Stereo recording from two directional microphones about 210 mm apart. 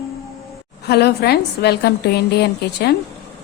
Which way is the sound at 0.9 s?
50° left (ahead or behind).